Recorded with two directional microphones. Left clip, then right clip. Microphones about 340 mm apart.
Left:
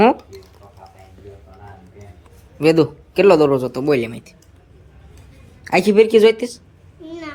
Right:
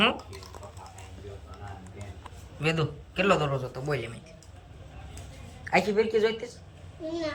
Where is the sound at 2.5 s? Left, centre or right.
Centre.